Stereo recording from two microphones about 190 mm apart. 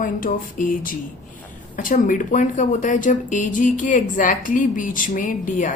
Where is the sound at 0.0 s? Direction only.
45° left (ahead or behind).